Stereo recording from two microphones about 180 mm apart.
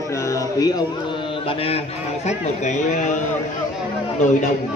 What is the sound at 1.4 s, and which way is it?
Speech, 30° left (ahead or behind).